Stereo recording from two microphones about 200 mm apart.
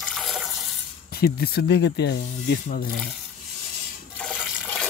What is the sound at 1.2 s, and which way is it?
Speech, 50° left (ahead or behind).